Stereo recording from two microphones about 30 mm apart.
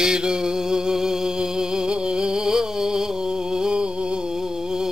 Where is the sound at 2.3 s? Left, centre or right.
Centre.